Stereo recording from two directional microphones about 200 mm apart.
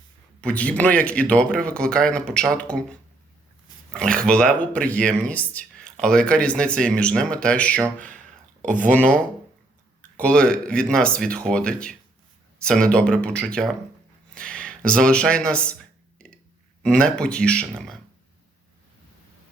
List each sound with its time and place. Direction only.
0.4 s speech: 5° left (ahead or behind)
3.9 s speech: 5° left (ahead or behind)
8.6 s speech: 40° right (ahead or behind)
8.9 s speech: 5° left (ahead or behind)
14.3 s a sound: 5° left (ahead or behind)
14.8 s speech: 5° left (ahead or behind)
16.1 s a sound: 5° left (ahead or behind)
16.8 s speech: 5° left (ahead or behind)